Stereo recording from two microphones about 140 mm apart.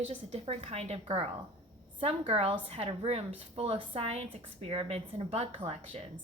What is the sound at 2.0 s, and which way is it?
A woman's voice, 45° right (ahead or behind).